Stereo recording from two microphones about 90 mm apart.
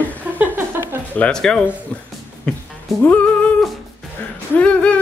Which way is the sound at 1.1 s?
10° left (ahead or behind).